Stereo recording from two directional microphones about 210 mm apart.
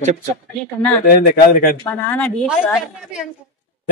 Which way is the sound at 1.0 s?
45° left (ahead or behind).